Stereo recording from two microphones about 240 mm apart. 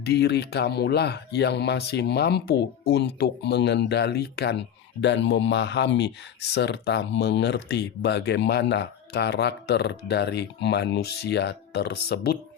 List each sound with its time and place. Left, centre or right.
0.0 s speech: left